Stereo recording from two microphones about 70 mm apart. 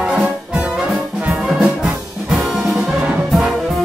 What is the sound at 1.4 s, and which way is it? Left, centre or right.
Music, centre.